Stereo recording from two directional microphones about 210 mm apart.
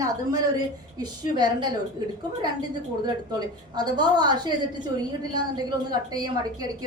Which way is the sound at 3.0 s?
20° right (ahead or behind).